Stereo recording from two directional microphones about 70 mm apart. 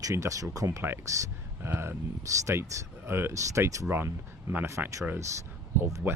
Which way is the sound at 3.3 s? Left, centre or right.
Right.